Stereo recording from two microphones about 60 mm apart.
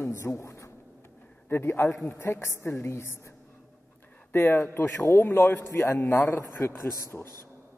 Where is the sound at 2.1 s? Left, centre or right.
Left.